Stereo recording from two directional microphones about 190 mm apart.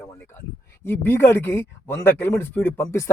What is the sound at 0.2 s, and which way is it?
Speech, 15° left (ahead or behind).